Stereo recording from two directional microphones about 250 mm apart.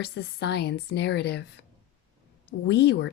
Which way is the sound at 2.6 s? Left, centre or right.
Left.